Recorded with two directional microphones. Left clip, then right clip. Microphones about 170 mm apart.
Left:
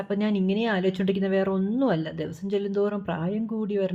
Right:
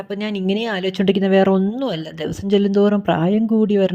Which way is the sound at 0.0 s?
45° right (ahead or behind).